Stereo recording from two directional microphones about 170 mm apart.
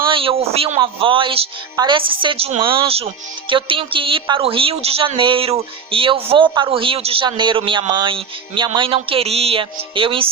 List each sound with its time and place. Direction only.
0.1 s a woman's voice: 30° right (ahead or behind)